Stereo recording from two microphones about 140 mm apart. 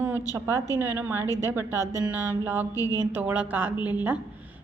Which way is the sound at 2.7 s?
25° left (ahead or behind).